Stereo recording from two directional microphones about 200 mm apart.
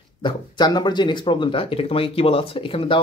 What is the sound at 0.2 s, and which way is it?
Speech, 25° left (ahead or behind).